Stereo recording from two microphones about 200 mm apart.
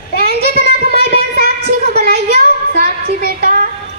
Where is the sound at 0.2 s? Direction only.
50° right (ahead or behind).